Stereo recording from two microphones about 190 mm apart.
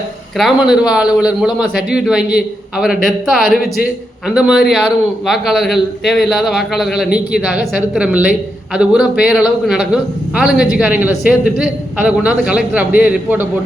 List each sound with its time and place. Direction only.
0.3 s a man's voice: centre (ahead or behind)